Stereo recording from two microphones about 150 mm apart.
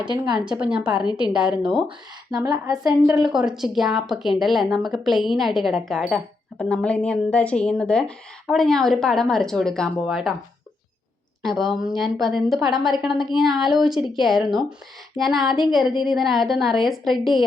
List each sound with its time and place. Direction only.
0.6 s a woman's voice: 5° right (ahead or behind)
2.3 s speech: 25° right (ahead or behind)
3.3 s a woman's voice: 5° right (ahead or behind)
11.4 s a woman's voice: centre (ahead or behind)